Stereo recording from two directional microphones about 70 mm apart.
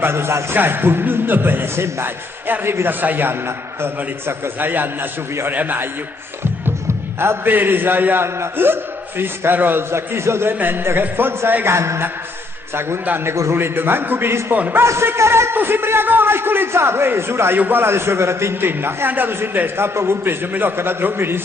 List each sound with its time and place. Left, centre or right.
0.0 s a man's voice: right
7.2 s a man's voice: right
13.1 s a man's voice: right
13.3 s a man's voice: right
13.6 s a man's voice: right
14.8 s a man's voice: right